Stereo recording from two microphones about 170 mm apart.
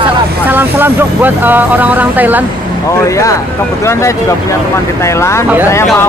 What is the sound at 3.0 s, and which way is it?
Speech, 20° left (ahead or behind).